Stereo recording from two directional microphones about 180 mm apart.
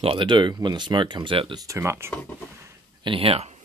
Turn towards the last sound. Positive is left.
turn(degrees=-35)  # may be behind; listen again after turning